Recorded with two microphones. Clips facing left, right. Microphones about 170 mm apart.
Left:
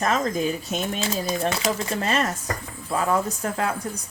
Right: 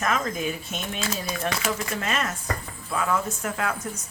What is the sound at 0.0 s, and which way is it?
Speech, 35° left (ahead or behind).